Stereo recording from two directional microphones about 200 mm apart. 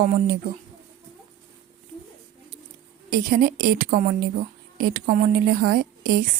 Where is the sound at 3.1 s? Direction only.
45° right (ahead or behind).